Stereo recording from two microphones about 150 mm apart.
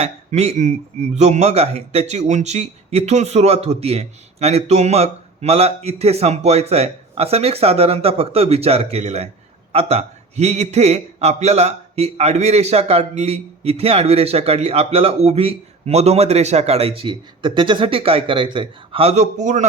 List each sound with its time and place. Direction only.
0.0 s a man's voice: 45° right (ahead or behind)